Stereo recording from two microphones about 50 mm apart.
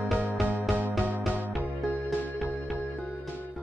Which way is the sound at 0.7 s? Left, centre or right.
Centre.